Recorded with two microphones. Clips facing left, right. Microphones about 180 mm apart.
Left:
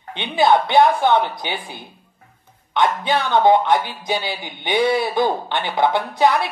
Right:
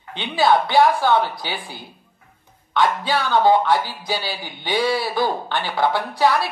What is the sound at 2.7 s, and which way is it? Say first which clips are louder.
Speech: left 1 dB; 20° left (ahead or behind).